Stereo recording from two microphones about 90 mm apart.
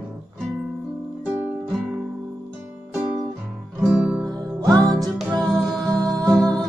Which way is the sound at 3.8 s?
5° right (ahead or behind).